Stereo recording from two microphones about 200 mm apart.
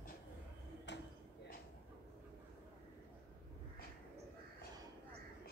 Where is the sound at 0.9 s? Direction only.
60° left (ahead or behind).